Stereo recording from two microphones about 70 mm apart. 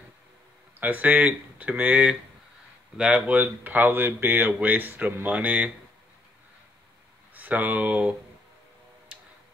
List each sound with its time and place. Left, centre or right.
0.7 s speech: right
7.3 s speech: right